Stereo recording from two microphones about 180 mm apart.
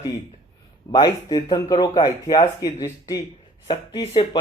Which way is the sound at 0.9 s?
20° left (ahead or behind).